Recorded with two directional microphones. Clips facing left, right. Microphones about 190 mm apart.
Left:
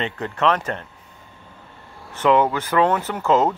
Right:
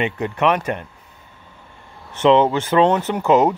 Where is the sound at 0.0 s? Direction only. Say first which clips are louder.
Right 3 dB; 15° right (ahead or behind).